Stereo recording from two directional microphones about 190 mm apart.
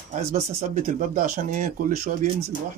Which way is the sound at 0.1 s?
40° right (ahead or behind).